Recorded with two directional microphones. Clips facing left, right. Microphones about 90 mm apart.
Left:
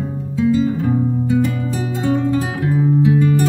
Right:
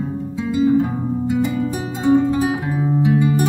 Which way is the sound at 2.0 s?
20° right (ahead or behind).